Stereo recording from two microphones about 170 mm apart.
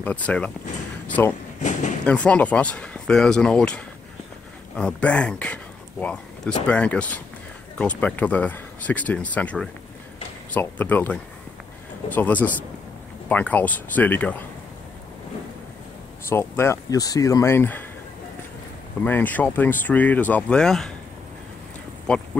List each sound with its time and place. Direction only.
0.0 s speech: 10° left (ahead or behind)
1.6 s a sound: 45° left (ahead or behind)
2.0 s speech: 5° left (ahead or behind)
12.2 s speech: 10° left (ahead or behind)
16.3 s speech: 15° left (ahead or behind)
19.0 s speech: 10° left (ahead or behind)
22.0 s a sound: 5° left (ahead or behind)